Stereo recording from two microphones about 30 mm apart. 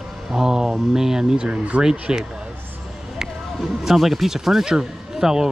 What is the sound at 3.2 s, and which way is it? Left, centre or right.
Music, centre.